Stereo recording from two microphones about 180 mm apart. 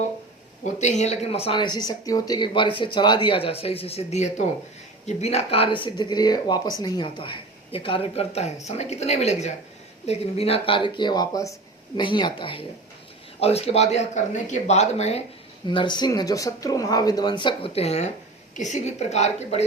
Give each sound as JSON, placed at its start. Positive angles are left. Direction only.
{"t": 0.6, "sound": "speech", "side_deg": 40}
{"t": 15.6, "sound": "speech", "side_deg": 25}